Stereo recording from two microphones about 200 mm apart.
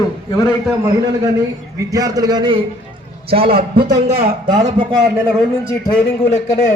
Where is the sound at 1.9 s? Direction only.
20° right (ahead or behind).